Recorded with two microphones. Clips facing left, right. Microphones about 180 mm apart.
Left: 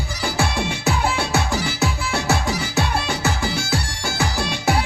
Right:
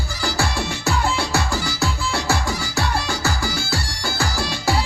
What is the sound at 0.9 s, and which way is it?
Music, 20° left (ahead or behind).